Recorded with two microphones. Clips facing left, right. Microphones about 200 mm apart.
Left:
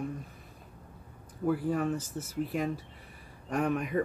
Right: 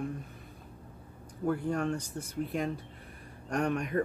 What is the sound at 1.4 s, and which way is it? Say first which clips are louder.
Speech: left 1 dB; 5° left (ahead or behind).